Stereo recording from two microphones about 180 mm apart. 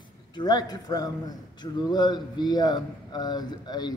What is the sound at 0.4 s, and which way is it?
Speech, 20° left (ahead or behind).